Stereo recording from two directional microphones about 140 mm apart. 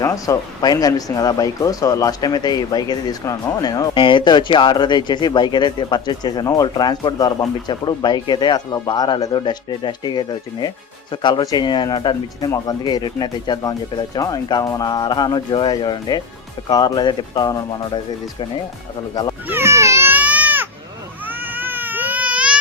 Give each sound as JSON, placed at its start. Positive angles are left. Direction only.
{"t": 0.0, "sound": "speech", "side_deg": 25}
{"t": 19.5, "sound": "baby cry", "side_deg": -15}